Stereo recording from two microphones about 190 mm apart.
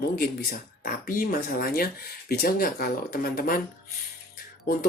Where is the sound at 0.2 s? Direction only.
50° left (ahead or behind).